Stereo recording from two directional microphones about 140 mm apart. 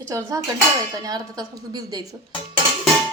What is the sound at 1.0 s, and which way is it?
Speech, 25° right (ahead or behind).